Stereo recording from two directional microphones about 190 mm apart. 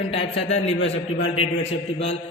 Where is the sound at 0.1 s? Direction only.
30° left (ahead or behind).